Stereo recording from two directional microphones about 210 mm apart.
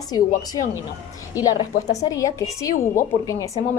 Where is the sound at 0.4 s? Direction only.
15° left (ahead or behind).